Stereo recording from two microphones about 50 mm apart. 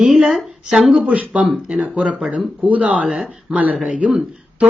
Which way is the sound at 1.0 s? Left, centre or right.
Right.